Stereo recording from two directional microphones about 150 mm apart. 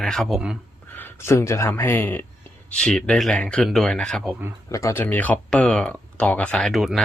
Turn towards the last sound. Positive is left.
turn(degrees=0)  # may be behind; listen again after turning